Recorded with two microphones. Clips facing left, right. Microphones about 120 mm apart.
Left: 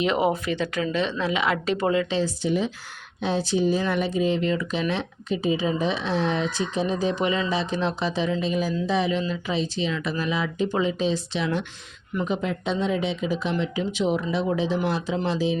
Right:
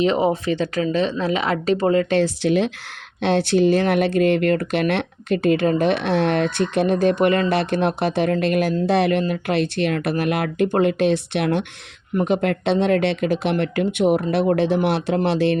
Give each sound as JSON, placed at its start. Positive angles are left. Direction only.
{"t": 0.0, "sound": "speech", "side_deg": -35}
{"t": 2.0, "sound": "speech", "side_deg": -70}
{"t": 12.2, "sound": "speech", "side_deg": -75}